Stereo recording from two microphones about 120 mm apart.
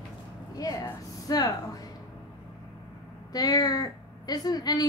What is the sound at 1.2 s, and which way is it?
Speech, 30° left (ahead or behind).